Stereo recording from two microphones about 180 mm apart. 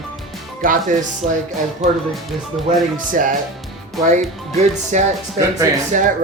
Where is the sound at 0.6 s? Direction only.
50° right (ahead or behind).